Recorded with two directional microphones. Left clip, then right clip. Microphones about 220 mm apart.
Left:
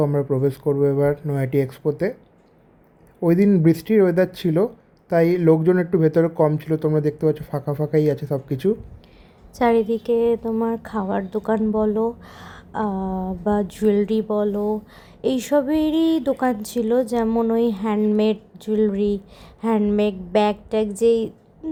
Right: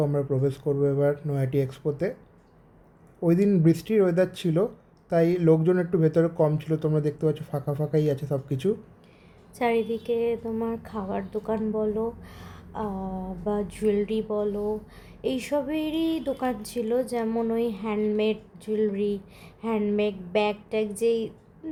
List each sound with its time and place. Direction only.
0.0 s speech: 15° left (ahead or behind)
3.2 s speech: 15° left (ahead or behind)